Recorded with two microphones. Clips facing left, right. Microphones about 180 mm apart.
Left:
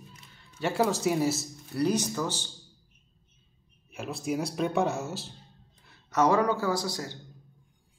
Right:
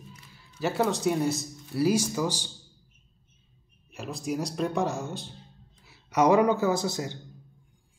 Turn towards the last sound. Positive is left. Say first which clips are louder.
# right 3 dB
turn(degrees=-20)  # may be behind; listen again after turning